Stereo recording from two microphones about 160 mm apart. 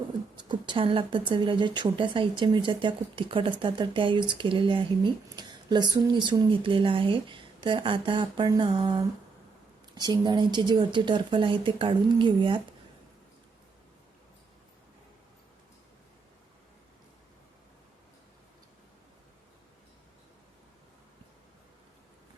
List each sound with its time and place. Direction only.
0.3 s a woman's voice: 30° right (ahead or behind)